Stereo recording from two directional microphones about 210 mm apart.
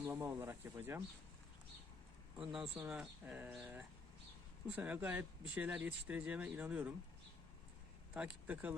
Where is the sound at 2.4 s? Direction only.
Centre (ahead or behind).